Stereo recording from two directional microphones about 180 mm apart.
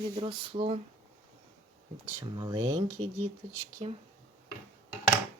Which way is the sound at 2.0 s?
20° right (ahead or behind).